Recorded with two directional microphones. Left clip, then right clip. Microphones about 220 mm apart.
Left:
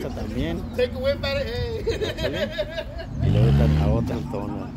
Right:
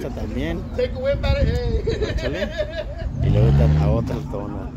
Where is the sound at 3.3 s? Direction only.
45° left (ahead or behind).